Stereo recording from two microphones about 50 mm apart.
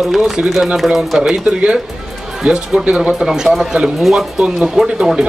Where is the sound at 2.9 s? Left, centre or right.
Centre.